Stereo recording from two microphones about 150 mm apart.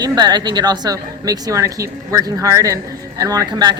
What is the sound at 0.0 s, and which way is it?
Speech, 30° right (ahead or behind).